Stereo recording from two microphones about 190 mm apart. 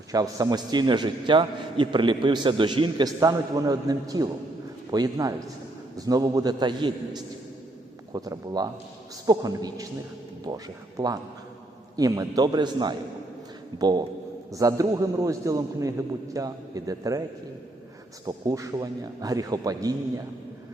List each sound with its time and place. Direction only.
0.1 s a man's voice: 20° right (ahead or behind)
18.3 s a man's voice: 20° right (ahead or behind)